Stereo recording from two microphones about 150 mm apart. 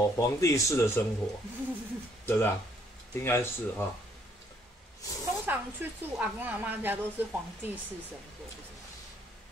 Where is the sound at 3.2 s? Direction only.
15° left (ahead or behind).